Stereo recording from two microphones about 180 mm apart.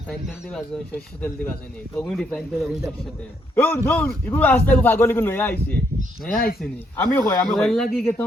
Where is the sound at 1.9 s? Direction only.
5° left (ahead or behind).